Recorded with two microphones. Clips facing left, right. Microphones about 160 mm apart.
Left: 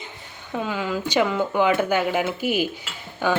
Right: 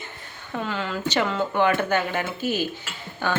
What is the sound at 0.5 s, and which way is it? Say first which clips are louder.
Speech: left 3 dB; 10° left (ahead or behind).